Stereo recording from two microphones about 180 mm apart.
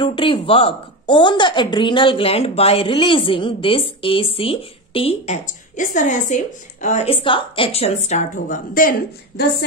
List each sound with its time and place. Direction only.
0.0 s a woman's voice: 30° left (ahead or behind); by 8.9 s 50° left (ahead or behind)